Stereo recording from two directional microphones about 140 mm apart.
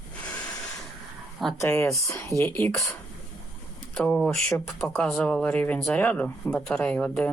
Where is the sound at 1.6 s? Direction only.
20° left (ahead or behind).